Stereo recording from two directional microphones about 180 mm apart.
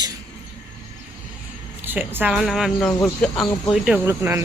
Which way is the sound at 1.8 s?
10° right (ahead or behind).